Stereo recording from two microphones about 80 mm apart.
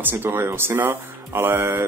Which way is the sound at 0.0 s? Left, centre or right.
Right.